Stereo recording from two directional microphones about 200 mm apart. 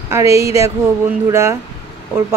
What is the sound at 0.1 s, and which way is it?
Speech, 15° right (ahead or behind).